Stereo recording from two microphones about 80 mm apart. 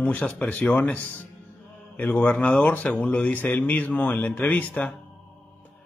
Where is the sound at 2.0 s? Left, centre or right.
Centre.